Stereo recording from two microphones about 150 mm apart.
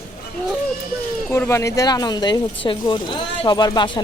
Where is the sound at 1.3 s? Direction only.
20° left (ahead or behind).